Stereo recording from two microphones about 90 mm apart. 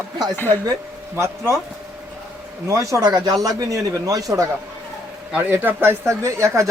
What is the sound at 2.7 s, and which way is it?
Speech, 35° right (ahead or behind).